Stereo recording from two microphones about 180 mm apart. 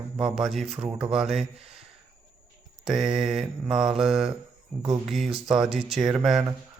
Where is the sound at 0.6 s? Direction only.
35° right (ahead or behind).